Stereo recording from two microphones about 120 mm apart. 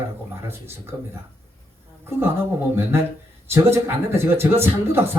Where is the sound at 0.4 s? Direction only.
20° right (ahead or behind).